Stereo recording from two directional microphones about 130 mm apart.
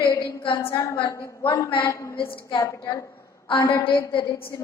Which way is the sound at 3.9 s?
40° left (ahead or behind).